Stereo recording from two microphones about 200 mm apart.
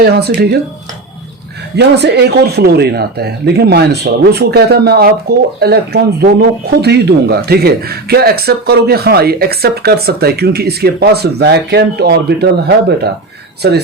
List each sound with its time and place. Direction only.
0.0 s speech: 55° right (ahead or behind)
1.7 s speech: 55° right (ahead or behind)